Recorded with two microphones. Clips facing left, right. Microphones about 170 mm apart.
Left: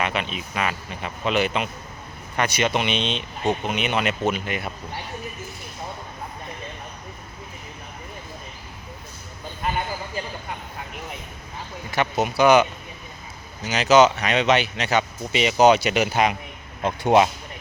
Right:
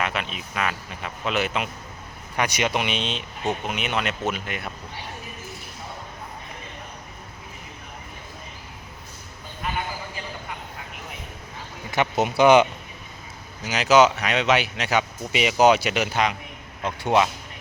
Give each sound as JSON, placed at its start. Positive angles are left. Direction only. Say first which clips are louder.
{"t": 0.0, "sound": "speech", "louder": "left 2 dB", "side_deg": 0}
{"t": 11.9, "sound": "speech", "louder": "even", "side_deg": -25}
{"t": 13.6, "sound": "speech", "louder": "left 1 dB", "side_deg": -10}
{"t": 16.8, "sound": "speech", "louder": "left 4 dB", "side_deg": 15}